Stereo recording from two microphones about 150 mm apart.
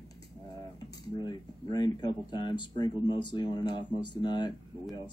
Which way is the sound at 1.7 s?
30° left (ahead or behind).